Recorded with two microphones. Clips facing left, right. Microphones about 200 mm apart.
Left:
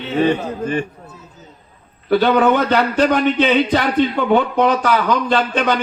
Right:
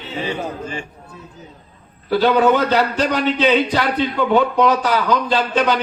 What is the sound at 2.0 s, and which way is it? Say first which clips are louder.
A man's voice: left 1 dB; 55° left (ahead or behind).